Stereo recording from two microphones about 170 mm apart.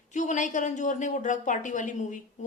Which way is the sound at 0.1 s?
45° left (ahead or behind).